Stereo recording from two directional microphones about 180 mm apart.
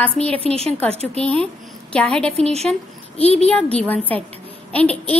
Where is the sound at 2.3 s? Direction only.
35° right (ahead or behind).